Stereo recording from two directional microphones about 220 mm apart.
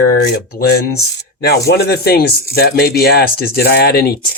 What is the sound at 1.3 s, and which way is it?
Speech, 45° left (ahead or behind).